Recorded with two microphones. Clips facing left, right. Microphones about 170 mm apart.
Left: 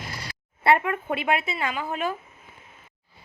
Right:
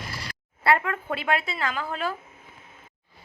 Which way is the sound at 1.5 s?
10° left (ahead or behind).